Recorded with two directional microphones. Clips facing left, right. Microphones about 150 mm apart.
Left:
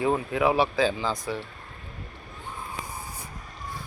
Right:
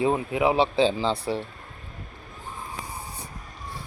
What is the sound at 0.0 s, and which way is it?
Speech, 20° right (ahead or behind).